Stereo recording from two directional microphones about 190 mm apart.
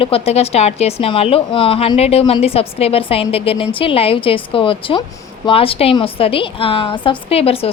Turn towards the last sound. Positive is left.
turn(degrees=30)  # may be behind; listen again after turning